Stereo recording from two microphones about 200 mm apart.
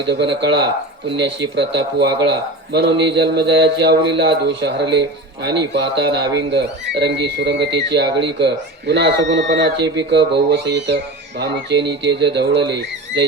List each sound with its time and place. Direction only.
0.1 s a man's voice: 60° right (ahead or behind)